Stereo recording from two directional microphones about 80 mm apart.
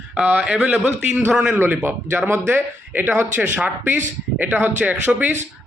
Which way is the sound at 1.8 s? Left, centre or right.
Right.